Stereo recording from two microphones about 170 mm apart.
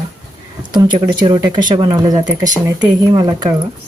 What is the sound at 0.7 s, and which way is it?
Speech, 25° right (ahead or behind).